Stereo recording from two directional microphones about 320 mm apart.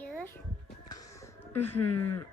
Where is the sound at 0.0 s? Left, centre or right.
Centre.